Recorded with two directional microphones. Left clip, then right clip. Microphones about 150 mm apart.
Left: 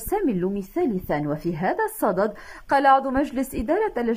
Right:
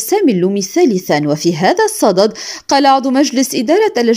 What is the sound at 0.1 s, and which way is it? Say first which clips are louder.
A woman's voice: right 11 dB; 35° right (ahead or behind).